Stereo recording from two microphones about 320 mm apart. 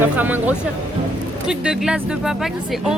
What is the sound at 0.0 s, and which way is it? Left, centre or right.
Speech, centre.